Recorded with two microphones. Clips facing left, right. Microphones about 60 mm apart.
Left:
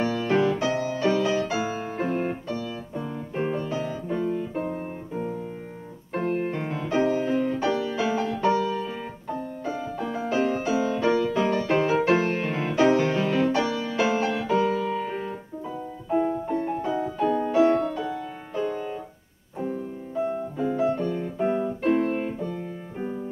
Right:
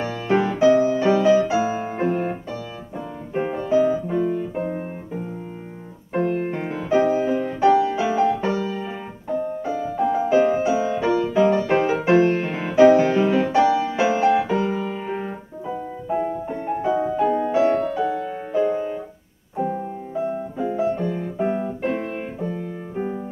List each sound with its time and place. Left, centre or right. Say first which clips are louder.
0.0 s music: right 1 dB; centre
6.1 s music: right 4 dB; centre
16.5 s music: right 4 dB; right
19.5 s piano: right 5 dB; centre